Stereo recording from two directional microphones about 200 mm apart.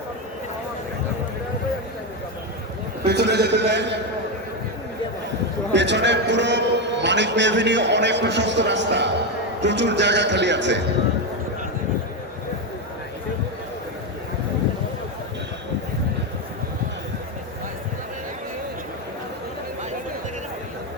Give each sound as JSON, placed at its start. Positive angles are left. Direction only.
{"t": 3.1, "sound": "a man's voice", "side_deg": -55}
{"t": 5.7, "sound": "a man's voice", "side_deg": -60}